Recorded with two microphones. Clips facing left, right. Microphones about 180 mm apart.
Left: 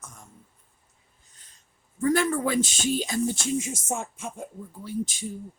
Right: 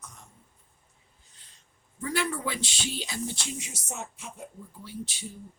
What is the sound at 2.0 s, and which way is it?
Speech, 45° left (ahead or behind).